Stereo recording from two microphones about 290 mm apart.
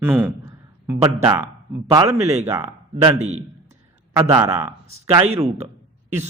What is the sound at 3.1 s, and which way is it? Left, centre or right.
A man's voice, right.